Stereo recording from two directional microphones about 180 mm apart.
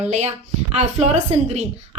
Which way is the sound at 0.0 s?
40° right (ahead or behind).